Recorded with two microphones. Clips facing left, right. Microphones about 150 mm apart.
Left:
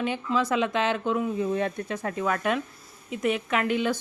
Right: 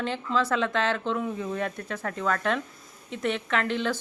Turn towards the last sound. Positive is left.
turn(degrees=10)  # may be behind; listen again after turning